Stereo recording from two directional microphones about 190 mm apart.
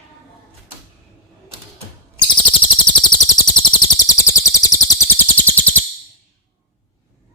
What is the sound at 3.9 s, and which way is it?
Bird, 15° left (ahead or behind).